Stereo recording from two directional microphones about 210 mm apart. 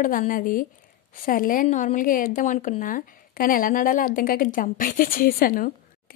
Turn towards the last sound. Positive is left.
turn(degrees=45)  # may be behind; listen again after turning